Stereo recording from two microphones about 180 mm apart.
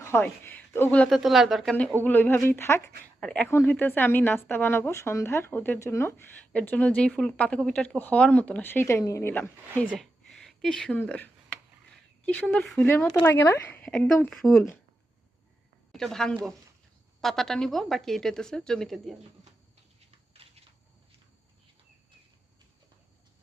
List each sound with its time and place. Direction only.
0.0 s a woman's voice: 10° left (ahead or behind)
2.0 s a woman's voice: 10° left (ahead or behind)
9.8 s a sound: centre (ahead or behind)
12.2 s a woman's voice: 5° left (ahead or behind)
15.9 s a woman's voice: centre (ahead or behind)
20.1 s a sound: 30° right (ahead or behind)